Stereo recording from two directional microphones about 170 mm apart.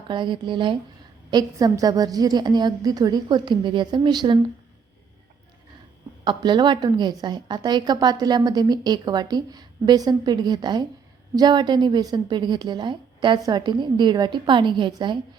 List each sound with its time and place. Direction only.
0.1 s a woman's voice: 30° right (ahead or behind)
6.2 s a woman's voice: 25° right (ahead or behind)